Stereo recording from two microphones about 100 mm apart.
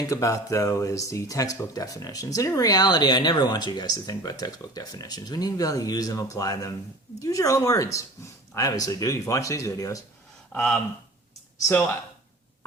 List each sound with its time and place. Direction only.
0.1 s speech: 35° left (ahead or behind)
10.5 s speech: 10° left (ahead or behind)